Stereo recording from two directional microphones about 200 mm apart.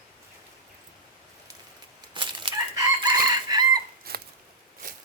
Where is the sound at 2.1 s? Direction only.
25° right (ahead or behind).